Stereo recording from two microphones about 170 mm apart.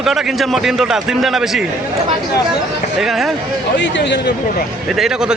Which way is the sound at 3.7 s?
90° left.